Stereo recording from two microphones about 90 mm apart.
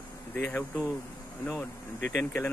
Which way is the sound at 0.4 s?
20° left (ahead or behind).